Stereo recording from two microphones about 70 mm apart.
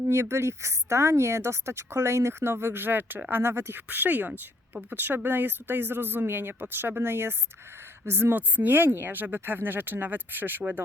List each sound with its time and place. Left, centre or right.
0.1 s a woman's voice: right